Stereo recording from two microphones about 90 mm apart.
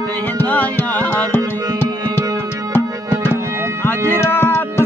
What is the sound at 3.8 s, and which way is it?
Music, 25° left (ahead or behind).